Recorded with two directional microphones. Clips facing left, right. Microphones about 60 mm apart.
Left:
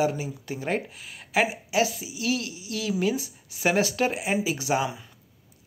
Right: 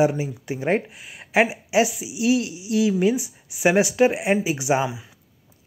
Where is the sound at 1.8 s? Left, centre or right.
Centre.